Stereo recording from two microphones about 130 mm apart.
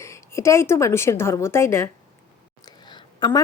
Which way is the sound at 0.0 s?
20° left (ahead or behind).